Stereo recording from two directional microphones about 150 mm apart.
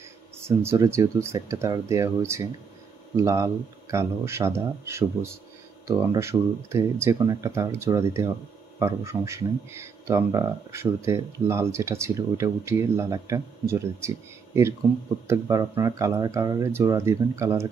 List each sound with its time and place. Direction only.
0.4 s speech: 15° right (ahead or behind)